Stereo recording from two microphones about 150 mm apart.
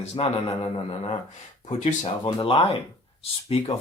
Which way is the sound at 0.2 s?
40° left (ahead or behind).